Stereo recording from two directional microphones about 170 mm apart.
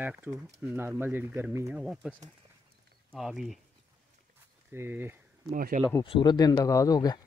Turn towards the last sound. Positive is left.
turn(degrees=20)  # may be behind; listen again after turning